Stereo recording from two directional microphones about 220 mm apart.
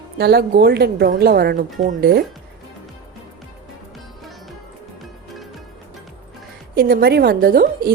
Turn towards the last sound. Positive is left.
turn(degrees=-40)  # may be behind; listen again after turning